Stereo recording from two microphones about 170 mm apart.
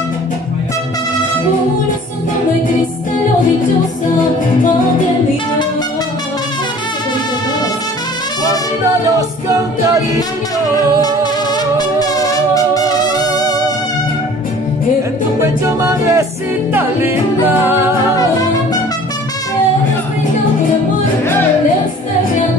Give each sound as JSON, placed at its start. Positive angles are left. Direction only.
{"t": 9.1, "sound": "a capella", "side_deg": -20}
{"t": 11.5, "sound": "music", "side_deg": 25}
{"t": 15.4, "sound": "music", "side_deg": -15}
{"t": 18.1, "sound": "music", "side_deg": 20}